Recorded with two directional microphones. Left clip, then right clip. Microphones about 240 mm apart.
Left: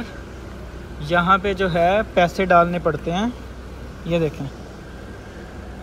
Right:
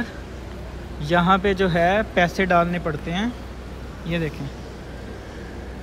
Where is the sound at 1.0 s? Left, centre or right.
Centre.